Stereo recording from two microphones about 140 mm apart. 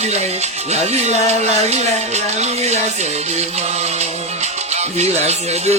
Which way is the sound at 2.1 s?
50° right (ahead or behind).